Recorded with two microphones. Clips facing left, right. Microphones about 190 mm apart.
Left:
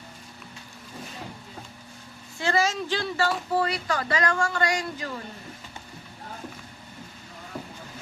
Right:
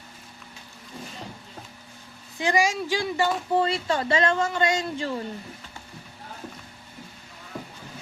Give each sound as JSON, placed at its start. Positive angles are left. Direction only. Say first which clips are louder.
{"t": 2.4, "sound": "speech", "louder": "right 2 dB", "side_deg": -15}